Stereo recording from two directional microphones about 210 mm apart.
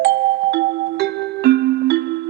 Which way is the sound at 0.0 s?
50° right (ahead or behind).